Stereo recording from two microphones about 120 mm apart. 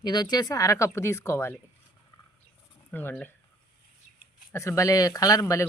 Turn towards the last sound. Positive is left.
turn(degrees=25)  # may be behind; listen again after turning